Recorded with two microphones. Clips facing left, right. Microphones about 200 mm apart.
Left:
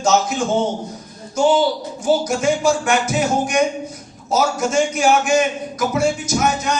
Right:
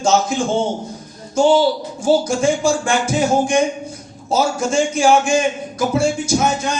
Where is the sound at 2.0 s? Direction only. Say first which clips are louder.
Right 2 dB; 30° right (ahead or behind).